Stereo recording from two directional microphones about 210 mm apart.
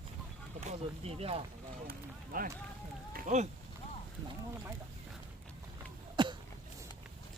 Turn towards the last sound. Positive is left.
turn(degrees=-20)  # may be behind; listen again after turning